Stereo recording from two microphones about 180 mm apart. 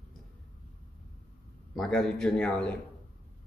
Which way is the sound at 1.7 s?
5° left (ahead or behind).